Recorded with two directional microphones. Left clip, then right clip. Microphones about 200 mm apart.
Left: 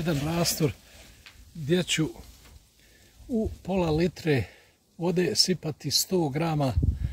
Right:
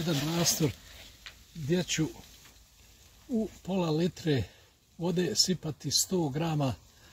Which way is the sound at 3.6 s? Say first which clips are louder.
Left 5 dB; 25° left (ahead or behind).